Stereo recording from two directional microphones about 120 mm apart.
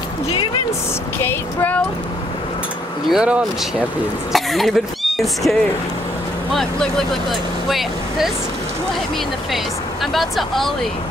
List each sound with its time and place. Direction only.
1.2 s female singing: 15° left (ahead or behind)
3.1 s speech: 10° right (ahead or behind)
10.1 s speech: centre (ahead or behind)